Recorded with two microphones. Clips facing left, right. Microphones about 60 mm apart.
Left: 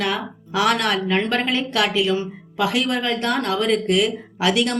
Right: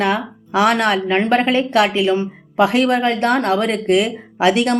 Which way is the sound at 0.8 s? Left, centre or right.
Right.